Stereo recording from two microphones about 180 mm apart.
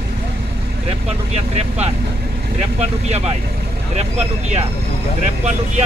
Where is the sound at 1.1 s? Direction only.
35° right (ahead or behind).